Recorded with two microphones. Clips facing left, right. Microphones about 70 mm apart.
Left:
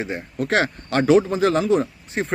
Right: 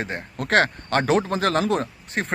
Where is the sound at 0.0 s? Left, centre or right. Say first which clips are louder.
Left 3 dB; right.